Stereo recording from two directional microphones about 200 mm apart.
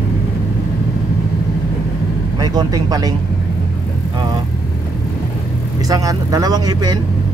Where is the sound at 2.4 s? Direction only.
20° right (ahead or behind).